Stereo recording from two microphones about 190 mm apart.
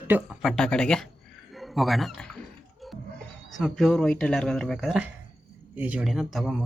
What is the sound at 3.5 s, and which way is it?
Speech, centre (ahead or behind).